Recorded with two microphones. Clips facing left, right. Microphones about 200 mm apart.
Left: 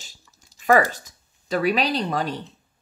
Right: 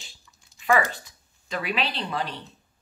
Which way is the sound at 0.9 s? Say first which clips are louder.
Even; 40° left (ahead or behind).